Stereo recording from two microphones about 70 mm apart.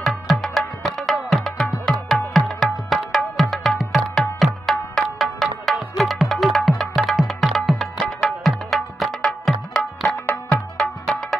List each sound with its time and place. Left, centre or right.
0.0 s music: centre
9.5 s tabla: centre
10.2 s music: left
10.8 s music: centre